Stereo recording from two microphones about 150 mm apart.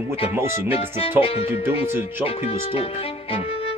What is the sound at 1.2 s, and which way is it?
Speech, 40° left (ahead or behind).